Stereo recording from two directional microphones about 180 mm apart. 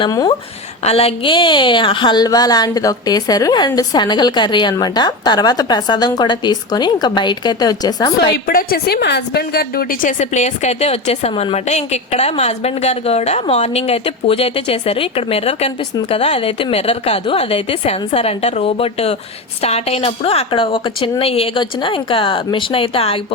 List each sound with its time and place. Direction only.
0.0 s a woman's voice: 25° left (ahead or behind)
8.2 s a woman's voice: 60° left (ahead or behind); by 23.2 s 30° left (ahead or behind)